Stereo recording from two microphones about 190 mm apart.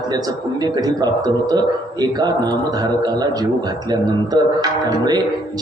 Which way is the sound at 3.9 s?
20° right (ahead or behind).